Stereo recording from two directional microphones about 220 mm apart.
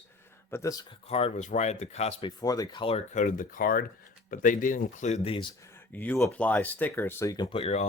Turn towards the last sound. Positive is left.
turn(degrees=25)  # may be behind; listen again after turning